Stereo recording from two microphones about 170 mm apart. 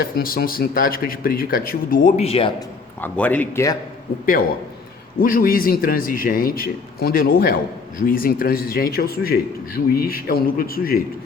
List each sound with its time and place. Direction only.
0.0 s a man's voice: 60° left (ahead or behind)
2.1 s a man's voice: 35° left (ahead or behind)
3.0 s speech: 10° left (ahead or behind)
5.2 s a man's voice: 55° left (ahead or behind)